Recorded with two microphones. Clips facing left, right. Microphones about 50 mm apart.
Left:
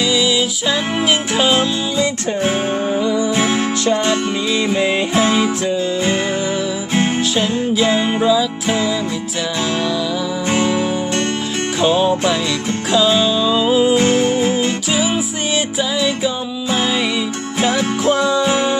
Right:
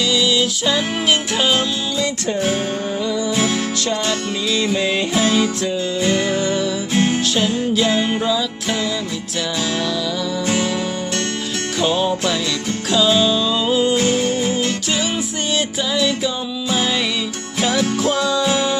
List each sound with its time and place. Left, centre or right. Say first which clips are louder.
0.0 s music: left 1 dB; centre
7.4 s music: left 2 dB; centre
10.5 s music: left 6 dB; centre
17.6 s music: left 1 dB; left